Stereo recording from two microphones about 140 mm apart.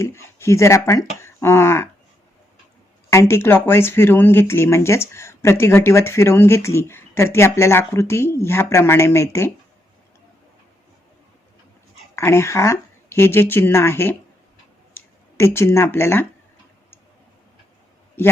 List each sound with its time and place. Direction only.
0.0 s speech: 20° left (ahead or behind)
3.1 s speech: 20° left (ahead or behind)
12.1 s speech: 20° left (ahead or behind)